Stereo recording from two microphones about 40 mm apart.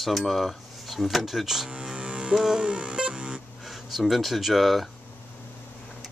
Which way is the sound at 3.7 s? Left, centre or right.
Centre.